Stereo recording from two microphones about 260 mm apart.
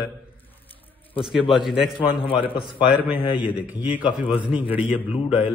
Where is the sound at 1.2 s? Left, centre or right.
Centre.